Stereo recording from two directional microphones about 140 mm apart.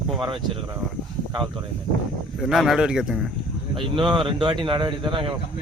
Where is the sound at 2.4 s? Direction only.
5° right (ahead or behind).